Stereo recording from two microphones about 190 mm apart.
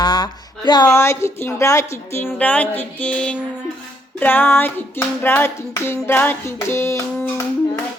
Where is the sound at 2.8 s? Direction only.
5° left (ahead or behind).